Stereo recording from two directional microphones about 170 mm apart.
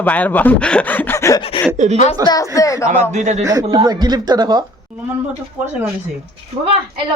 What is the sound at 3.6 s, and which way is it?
Speech, 25° right (ahead or behind).